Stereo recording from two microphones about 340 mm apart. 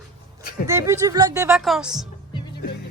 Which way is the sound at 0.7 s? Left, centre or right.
Centre.